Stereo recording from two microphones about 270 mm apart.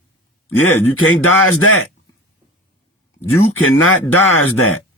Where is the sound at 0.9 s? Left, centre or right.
Left.